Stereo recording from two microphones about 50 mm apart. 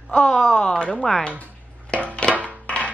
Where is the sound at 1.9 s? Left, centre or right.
Left.